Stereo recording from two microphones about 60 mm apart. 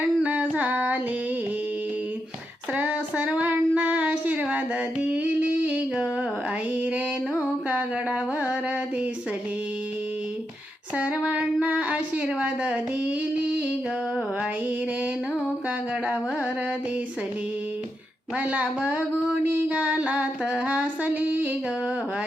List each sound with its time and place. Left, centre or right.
0.0 s female singing: right
2.7 s child singing: right
4.4 s a sound: right
6.7 s music: right
10.9 s female singing: right
11.3 s a sound: right
18.3 s female singing: right